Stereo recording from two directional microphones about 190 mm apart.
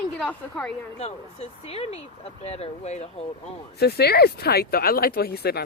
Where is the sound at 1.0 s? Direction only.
35° left (ahead or behind).